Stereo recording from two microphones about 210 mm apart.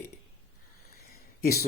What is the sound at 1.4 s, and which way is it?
Speech, 45° left (ahead or behind).